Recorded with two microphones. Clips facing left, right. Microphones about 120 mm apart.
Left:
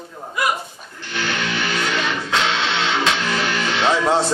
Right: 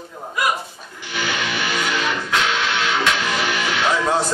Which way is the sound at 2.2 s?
30° left (ahead or behind).